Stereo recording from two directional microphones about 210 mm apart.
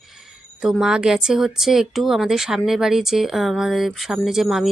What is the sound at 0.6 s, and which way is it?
Speech, 5° right (ahead or behind).